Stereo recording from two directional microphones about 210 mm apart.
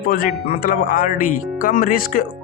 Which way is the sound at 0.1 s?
40° left (ahead or behind).